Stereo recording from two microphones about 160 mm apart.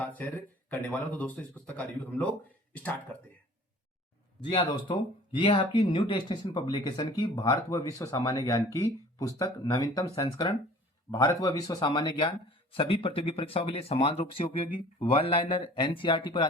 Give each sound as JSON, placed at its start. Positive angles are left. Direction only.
{"t": 0.0, "sound": "speech", "side_deg": 10}
{"t": 4.4, "sound": "speech", "side_deg": 30}